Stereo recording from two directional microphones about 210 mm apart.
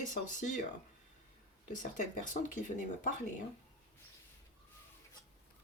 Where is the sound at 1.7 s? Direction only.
35° left (ahead or behind).